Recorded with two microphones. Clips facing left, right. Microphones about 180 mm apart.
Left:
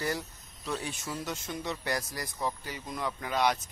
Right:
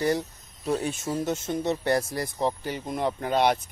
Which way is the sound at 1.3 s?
25° right (ahead or behind).